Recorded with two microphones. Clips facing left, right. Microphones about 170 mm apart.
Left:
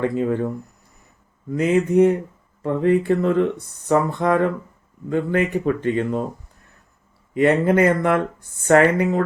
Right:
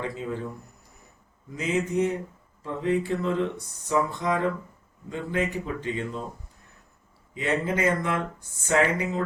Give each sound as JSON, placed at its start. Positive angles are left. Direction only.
{"t": 0.0, "sound": "speech", "side_deg": 60}
{"t": 1.5, "sound": "speech", "side_deg": 60}
{"t": 7.3, "sound": "speech", "side_deg": 60}